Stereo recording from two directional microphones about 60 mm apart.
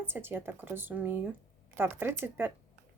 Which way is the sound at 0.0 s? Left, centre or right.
Right.